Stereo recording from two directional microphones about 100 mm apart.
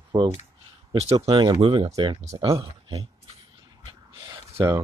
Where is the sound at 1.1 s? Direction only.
45° right (ahead or behind).